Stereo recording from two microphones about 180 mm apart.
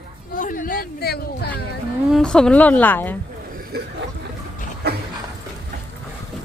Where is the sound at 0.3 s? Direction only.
50° left (ahead or behind).